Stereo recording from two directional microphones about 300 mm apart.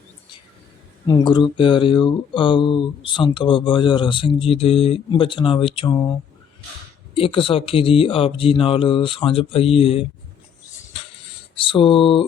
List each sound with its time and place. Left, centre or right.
1.0 s speech: centre
7.1 s speech: centre
11.5 s speech: centre